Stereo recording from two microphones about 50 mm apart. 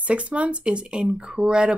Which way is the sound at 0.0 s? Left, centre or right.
Right.